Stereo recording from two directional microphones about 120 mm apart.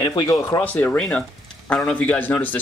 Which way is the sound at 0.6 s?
15° left (ahead or behind).